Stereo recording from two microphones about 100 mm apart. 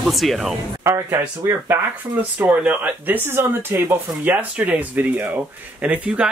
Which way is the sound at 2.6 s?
15° right (ahead or behind).